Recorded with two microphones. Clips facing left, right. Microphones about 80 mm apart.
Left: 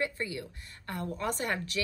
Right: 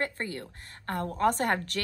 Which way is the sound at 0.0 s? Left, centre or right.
Right.